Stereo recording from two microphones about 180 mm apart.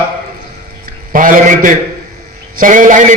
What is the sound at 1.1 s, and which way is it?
A man's voice, 45° right (ahead or behind).